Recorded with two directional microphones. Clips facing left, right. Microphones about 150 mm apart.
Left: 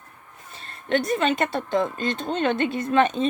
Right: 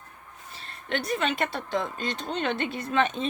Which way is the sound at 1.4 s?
45° left (ahead or behind).